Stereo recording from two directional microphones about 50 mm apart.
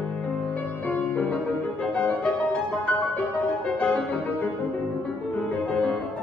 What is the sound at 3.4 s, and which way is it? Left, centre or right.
Music, left.